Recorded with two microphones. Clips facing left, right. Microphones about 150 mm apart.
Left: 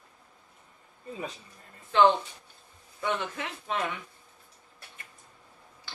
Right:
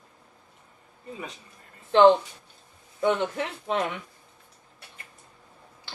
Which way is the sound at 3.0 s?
30° right (ahead or behind).